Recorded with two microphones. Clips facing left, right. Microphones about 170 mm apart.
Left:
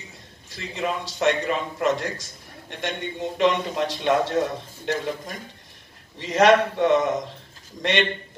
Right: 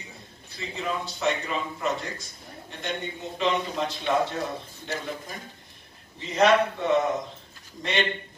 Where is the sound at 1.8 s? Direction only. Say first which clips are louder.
Left 6 dB; 90° left.